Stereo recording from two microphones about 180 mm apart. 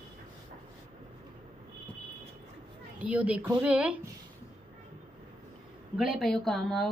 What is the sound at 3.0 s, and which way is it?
Speech, 10° right (ahead or behind).